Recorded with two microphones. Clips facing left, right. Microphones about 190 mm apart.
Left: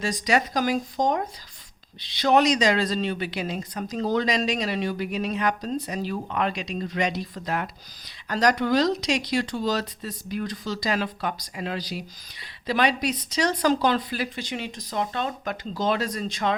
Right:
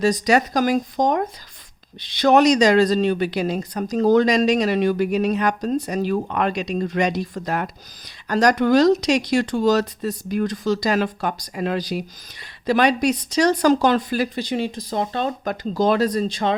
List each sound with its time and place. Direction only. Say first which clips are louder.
0.0 s speech: right 6 dB; 40° right (ahead or behind)